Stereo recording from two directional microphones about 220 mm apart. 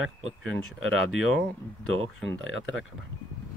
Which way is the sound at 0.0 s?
70° right (ahead or behind).